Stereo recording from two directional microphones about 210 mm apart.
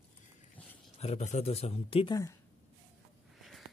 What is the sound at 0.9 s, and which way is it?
Speech, 30° left (ahead or behind).